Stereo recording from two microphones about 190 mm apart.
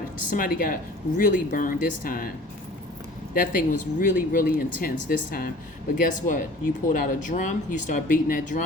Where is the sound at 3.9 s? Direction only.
45° left (ahead or behind).